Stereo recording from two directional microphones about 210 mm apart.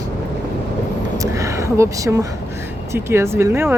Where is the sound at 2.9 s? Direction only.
10° right (ahead or behind).